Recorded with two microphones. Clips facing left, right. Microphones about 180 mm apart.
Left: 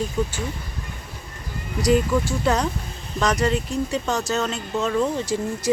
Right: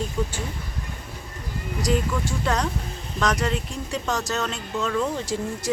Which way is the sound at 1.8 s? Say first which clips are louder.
Left 5 dB; 5° left (ahead or behind).